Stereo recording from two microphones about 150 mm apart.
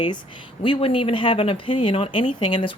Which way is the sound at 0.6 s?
35° left (ahead or behind).